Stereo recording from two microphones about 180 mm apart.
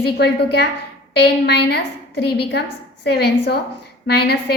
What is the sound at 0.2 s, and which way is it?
A woman's voice, 65° left (ahead or behind).